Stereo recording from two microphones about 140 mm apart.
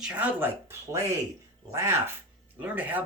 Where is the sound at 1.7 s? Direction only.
20° right (ahead or behind).